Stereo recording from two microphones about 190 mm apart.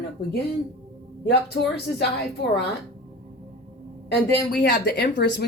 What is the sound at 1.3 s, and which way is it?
Speech, 60° left (ahead or behind).